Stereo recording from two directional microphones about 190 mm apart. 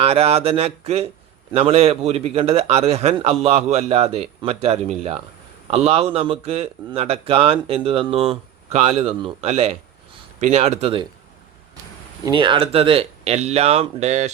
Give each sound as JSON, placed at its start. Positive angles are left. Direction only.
{"t": 0.0, "sound": "speech", "side_deg": -30}
{"t": 12.2, "sound": "speech", "side_deg": -25}